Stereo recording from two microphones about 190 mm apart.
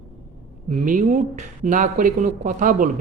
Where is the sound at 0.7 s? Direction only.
40° right (ahead or behind).